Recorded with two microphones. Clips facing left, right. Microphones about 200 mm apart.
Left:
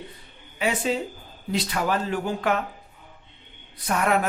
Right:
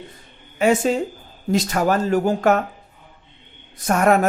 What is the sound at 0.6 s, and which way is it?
Speech, 45° right (ahead or behind).